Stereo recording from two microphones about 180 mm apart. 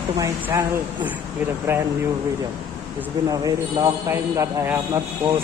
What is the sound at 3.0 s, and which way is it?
A man's voice, 20° right (ahead or behind).